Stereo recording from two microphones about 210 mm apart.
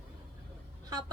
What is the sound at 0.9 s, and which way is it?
Speech, 20° right (ahead or behind).